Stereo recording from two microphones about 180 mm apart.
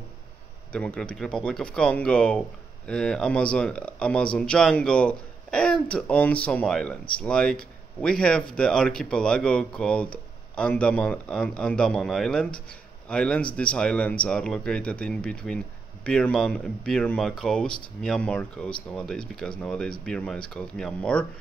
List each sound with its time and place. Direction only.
0.7 s speech: 5° left (ahead or behind)